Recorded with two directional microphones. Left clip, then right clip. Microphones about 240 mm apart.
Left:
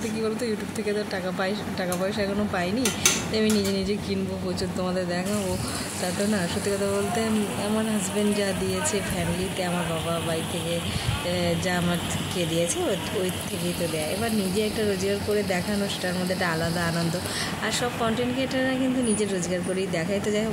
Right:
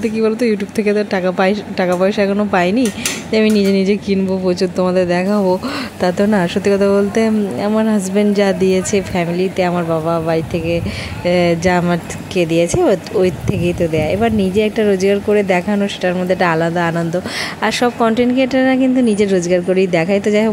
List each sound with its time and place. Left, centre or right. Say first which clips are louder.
0.2 s speech: right 13 dB; right
8.3 s speech: right 15 dB; right
11.2 s speech: right 14 dB; right